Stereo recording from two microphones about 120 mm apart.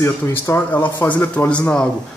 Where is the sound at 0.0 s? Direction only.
20° left (ahead or behind).